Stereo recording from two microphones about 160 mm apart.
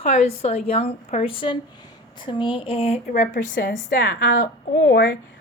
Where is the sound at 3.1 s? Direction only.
55° left (ahead or behind); by 5.1 s 80° left.